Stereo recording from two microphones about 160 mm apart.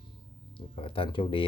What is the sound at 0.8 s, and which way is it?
Speech, 35° left (ahead or behind).